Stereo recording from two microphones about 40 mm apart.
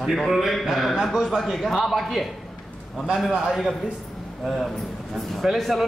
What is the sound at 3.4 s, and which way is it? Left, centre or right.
A man's voice, centre.